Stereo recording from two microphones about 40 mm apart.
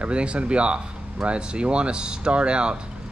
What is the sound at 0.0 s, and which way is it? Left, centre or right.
Speech, right.